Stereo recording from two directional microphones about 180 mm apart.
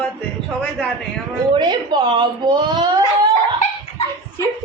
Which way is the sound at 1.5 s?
25° right (ahead or behind).